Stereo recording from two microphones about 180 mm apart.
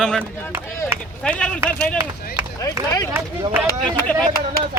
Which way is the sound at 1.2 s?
5° left (ahead or behind).